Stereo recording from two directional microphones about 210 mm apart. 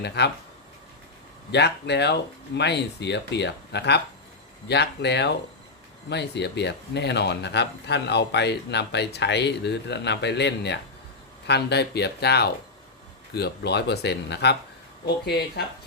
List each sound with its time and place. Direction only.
0.2 s speech: 50° left (ahead or behind)
1.5 s speech: 55° left (ahead or behind)